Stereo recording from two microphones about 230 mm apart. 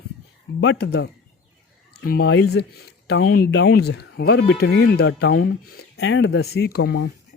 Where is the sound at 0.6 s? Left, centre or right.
Left.